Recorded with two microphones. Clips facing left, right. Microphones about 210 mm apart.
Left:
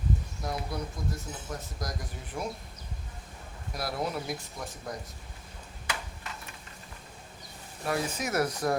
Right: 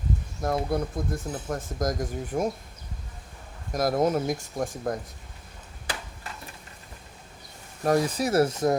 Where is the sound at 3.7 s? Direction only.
45° right (ahead or behind).